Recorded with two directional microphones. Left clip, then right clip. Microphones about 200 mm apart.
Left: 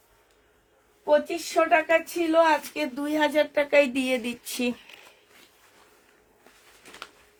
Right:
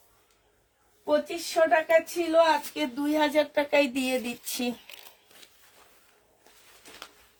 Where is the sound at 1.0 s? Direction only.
40° left (ahead or behind).